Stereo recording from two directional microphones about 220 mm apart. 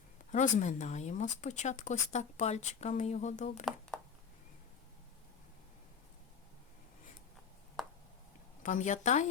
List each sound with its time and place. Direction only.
0.3 s speech: 35° left (ahead or behind)
7.8 s a sound: centre (ahead or behind)
8.6 s speech: 35° left (ahead or behind)